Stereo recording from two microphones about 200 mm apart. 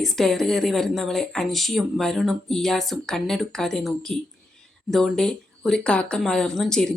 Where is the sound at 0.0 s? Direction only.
Centre (ahead or behind).